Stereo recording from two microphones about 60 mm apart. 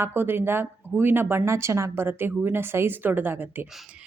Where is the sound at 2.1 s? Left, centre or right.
Right.